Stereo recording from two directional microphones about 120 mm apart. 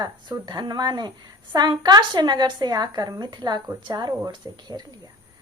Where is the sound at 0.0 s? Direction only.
35° right (ahead or behind).